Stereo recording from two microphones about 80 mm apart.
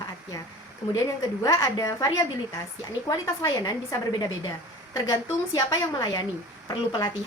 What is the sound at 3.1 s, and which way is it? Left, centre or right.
A woman's voice, left.